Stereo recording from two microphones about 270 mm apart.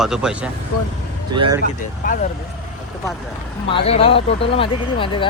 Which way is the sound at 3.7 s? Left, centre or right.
Left.